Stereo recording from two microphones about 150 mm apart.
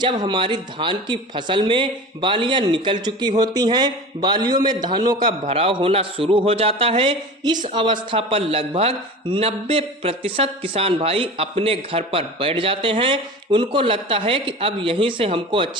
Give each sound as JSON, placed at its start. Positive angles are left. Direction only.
{"t": 0.0, "sound": "a man's voice", "side_deg": -30}
{"t": 5.5, "sound": "a man's voice", "side_deg": -40}